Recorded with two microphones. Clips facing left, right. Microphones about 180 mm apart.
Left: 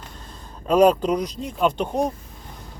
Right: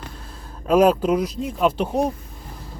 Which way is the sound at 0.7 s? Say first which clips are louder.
Even; 5° right (ahead or behind).